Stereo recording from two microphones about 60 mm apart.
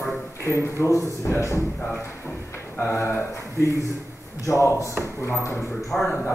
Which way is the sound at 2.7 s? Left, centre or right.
Left.